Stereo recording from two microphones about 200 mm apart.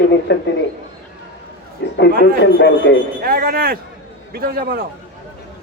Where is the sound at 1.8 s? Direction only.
55° left (ahead or behind).